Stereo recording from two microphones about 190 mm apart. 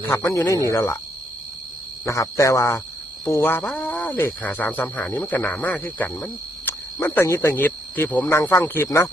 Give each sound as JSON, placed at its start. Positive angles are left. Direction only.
{"t": 0.1, "sound": "speech", "side_deg": 15}
{"t": 2.0, "sound": "speech", "side_deg": 15}